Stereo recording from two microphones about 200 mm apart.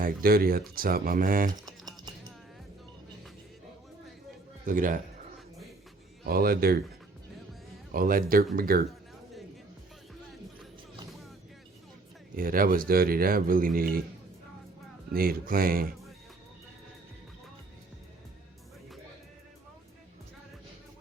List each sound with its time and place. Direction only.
0.0 s speech: 45° right (ahead or behind)
1.6 s music: 20° right (ahead or behind)
4.6 s speech: 40° right (ahead or behind)
6.2 s speech: 50° right (ahead or behind)
7.9 s speech: 45° right (ahead or behind)
12.4 s speech: 45° right (ahead or behind)
15.1 s speech: 45° right (ahead or behind)